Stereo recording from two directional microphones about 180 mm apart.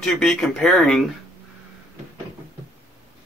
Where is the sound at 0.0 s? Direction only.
Centre (ahead or behind).